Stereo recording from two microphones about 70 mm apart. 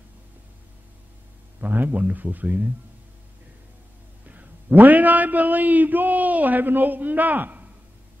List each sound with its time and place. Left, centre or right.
1.6 s a man's voice: right
4.3 s a man's voice: right